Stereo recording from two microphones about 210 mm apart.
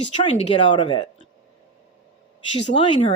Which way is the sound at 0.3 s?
30° left (ahead or behind).